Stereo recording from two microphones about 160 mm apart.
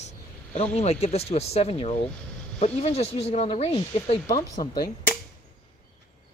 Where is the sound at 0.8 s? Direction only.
40° left (ahead or behind).